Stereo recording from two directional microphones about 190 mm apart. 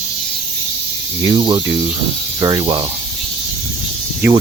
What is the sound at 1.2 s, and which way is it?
Speech, 25° right (ahead or behind).